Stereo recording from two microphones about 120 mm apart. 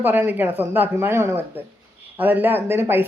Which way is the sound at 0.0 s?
15° right (ahead or behind).